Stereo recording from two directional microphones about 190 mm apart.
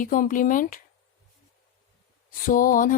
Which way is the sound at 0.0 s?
45° left (ahead or behind).